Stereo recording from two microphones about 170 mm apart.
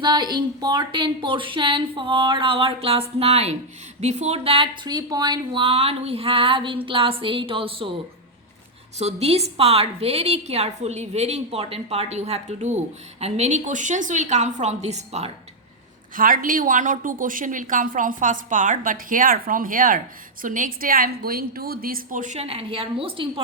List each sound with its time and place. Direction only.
0.0 s a woman's voice: 25° right (ahead or behind)
9.0 s a woman's voice: 40° right (ahead or behind)
16.1 s a woman's voice: 55° right (ahead or behind); by 23.3 s 30° right (ahead or behind)